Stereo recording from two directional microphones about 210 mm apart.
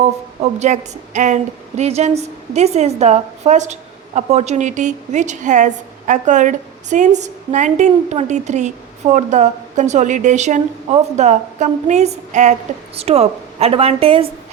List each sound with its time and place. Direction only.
0.6 s a woman's voice: 35° right (ahead or behind)